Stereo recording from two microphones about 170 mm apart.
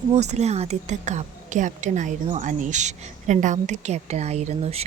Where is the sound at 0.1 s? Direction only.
40° right (ahead or behind).